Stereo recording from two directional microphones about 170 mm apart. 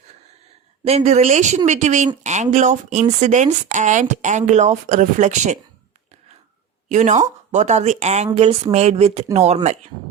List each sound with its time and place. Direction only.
0.9 s speech: 40° right (ahead or behind)
6.8 s speech: 45° right (ahead or behind)